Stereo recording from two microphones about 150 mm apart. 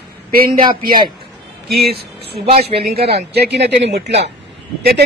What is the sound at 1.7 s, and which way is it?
Speech, 90° right.